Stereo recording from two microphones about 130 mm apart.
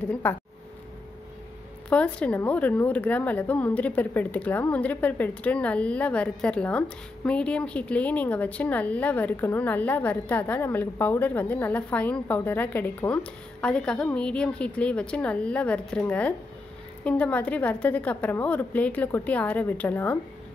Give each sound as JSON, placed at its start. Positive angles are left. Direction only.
{"t": 0.1, "sound": "a woman's voice", "side_deg": 15}
{"t": 1.9, "sound": "a woman's voice", "side_deg": 10}